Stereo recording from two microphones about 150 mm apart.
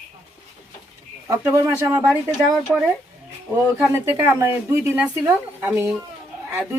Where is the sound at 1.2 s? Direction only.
15° right (ahead or behind).